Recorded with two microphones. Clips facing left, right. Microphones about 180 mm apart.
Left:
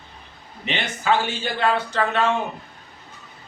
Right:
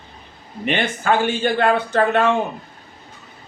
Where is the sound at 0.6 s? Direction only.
50° right (ahead or behind).